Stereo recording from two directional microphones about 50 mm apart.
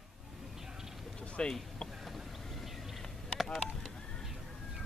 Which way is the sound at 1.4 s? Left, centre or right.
Centre.